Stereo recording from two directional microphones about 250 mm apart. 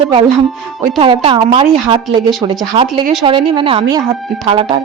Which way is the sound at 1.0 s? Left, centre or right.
Right.